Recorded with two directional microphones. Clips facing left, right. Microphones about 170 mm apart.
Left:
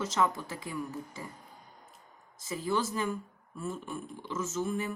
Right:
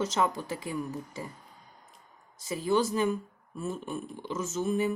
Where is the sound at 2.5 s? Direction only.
20° right (ahead or behind).